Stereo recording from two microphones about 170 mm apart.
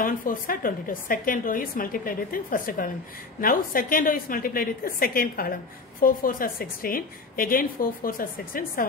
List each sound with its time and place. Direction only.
0.0 s a woman's voice: 55° left (ahead or behind)